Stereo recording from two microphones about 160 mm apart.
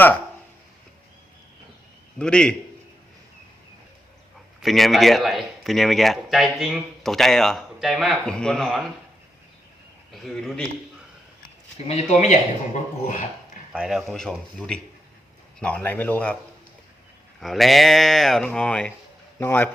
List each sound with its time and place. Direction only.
2.1 s speech: 5° left (ahead or behind)
4.6 s speech: centre (ahead or behind)
10.1 s speech: centre (ahead or behind)
11.9 s speech: 40° left (ahead or behind)
13.7 s speech: centre (ahead or behind)
17.4 s speech: centre (ahead or behind)